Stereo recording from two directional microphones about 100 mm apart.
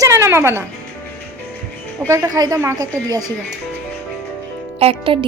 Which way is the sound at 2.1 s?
35° right (ahead or behind).